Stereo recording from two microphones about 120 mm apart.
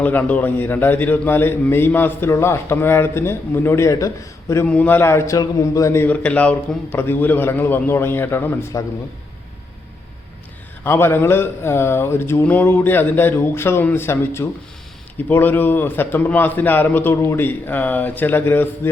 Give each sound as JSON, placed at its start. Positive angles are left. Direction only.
{"t": 0.0, "sound": "a man's voice", "side_deg": 15}
{"t": 4.6, "sound": "a man's voice", "side_deg": 10}
{"t": 10.8, "sound": "a man's voice", "side_deg": 20}